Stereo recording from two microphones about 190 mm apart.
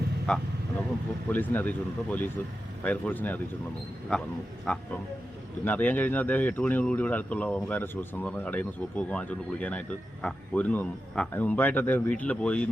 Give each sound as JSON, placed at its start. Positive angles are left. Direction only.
{"t": 1.3, "sound": "speech", "side_deg": 10}